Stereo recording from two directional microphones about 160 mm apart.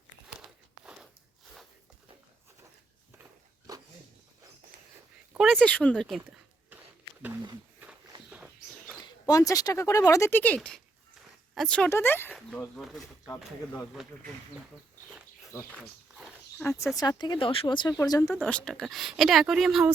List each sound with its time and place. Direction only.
3.7 s a sound: 20° right (ahead or behind)
5.3 s a sound: centre (ahead or behind)
9.2 s speech: 20° left (ahead or behind); by 11.9 s 5° left (ahead or behind)
11.9 s speech: 15° left (ahead or behind); by 14.1 s 5° right (ahead or behind)
15.8 s wild animals: 5° right (ahead or behind)
16.6 s speech: 15° left (ahead or behind)
18.4 s speech: 5° left (ahead or behind)